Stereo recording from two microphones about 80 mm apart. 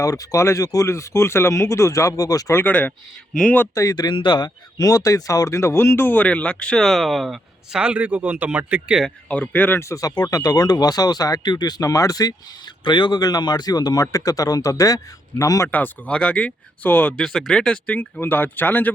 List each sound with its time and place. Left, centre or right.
0.0 s speech: left
2.6 s speech: centre
3.8 s speech: left
4.8 s speech: left; by 7.8 s centre
7.8 s speech: centre
9.3 s speech: centre
9.8 s speech: left
12.8 s speech: left
15.7 s speech: centre
17.2 s speech: centre; by 18.9 s left